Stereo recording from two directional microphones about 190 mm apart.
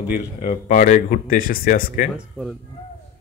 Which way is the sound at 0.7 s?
45° left (ahead or behind).